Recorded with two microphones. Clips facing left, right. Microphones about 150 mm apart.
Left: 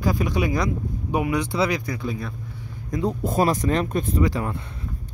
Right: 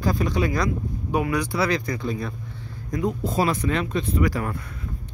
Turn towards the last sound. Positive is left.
turn(degrees=25)  # may be behind; listen again after turning